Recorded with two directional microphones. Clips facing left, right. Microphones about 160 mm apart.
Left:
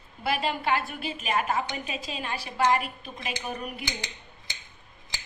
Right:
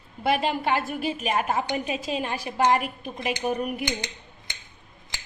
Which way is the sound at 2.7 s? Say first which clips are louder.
Right 3 dB; 50° right (ahead or behind).